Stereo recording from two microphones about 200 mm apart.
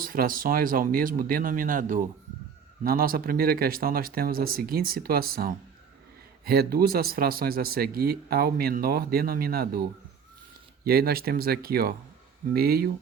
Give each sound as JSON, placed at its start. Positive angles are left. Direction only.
{"t": 0.0, "sound": "speech", "side_deg": -45}
{"t": 10.8, "sound": "speech", "side_deg": -50}